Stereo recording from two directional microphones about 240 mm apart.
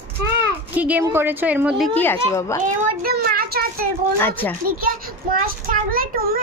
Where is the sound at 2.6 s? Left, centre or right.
Right.